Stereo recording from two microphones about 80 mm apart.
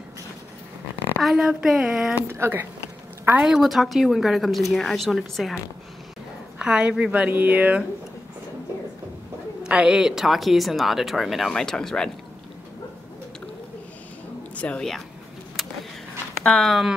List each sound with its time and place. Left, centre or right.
1.2 s speech: centre
2.3 s a woman's voice: right
3.4 s speech: centre
6.6 s a woman's voice: centre
9.6 s speech: centre
14.5 s a woman's voice: centre
15.6 s vehicle: centre
16.4 s speech: centre